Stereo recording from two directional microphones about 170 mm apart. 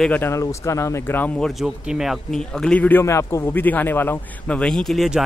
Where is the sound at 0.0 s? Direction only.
10° left (ahead or behind).